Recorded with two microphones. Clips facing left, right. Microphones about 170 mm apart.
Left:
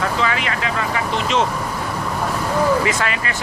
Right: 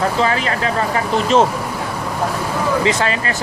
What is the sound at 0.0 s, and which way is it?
Speech, 35° right (ahead or behind).